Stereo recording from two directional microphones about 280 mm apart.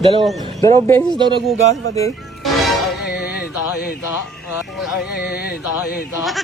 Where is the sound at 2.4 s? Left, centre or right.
Centre.